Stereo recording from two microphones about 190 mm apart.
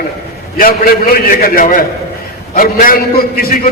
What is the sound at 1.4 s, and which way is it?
A man's voice, 45° left (ahead or behind).